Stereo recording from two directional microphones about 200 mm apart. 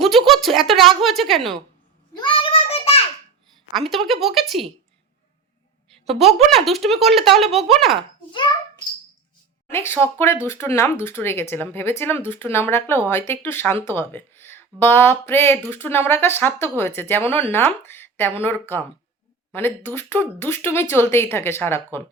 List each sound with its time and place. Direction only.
0.3 s speech: centre (ahead or behind)
2.1 s child singing: 25° left (ahead or behind)
3.8 s speech: centre (ahead or behind)
6.1 s speech: centre (ahead or behind)
9.6 s speech: 10° left (ahead or behind)